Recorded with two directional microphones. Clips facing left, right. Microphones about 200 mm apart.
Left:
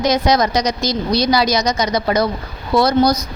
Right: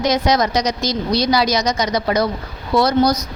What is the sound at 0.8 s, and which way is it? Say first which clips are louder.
Speech: left 1 dB; 10° left (ahead or behind).